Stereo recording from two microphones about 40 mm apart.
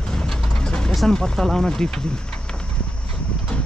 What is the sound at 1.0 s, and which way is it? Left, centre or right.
Speech, centre.